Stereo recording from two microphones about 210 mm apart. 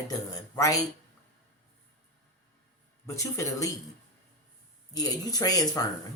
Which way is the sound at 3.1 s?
15° left (ahead or behind).